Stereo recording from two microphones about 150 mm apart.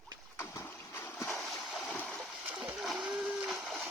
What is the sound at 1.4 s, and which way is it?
Stream, centre (ahead or behind).